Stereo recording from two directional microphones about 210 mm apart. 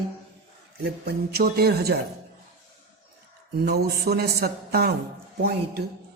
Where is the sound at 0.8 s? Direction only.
50° right (ahead or behind).